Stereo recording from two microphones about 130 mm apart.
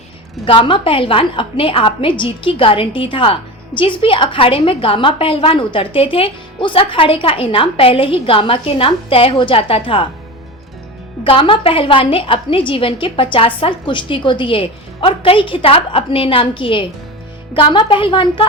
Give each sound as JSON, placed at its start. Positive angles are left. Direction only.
{"t": 0.4, "sound": "a woman's voice", "side_deg": 45}
{"t": 11.2, "sound": "a woman's voice", "side_deg": 40}